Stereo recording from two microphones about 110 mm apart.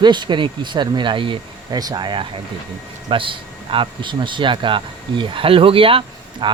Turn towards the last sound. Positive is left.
turn(degrees=-55)  # may be behind; listen again after turning